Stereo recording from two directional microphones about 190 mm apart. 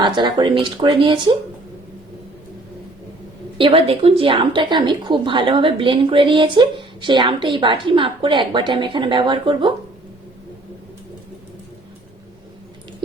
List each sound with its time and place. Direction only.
0.0 s a woman's voice: 25° right (ahead or behind)
3.6 s a woman's voice: 30° right (ahead or behind)